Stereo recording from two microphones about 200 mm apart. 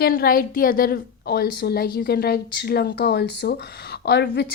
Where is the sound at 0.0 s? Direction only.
50° left (ahead or behind).